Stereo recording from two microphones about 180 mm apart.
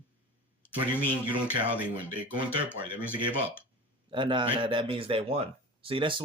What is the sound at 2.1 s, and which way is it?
Speech, 10° right (ahead or behind).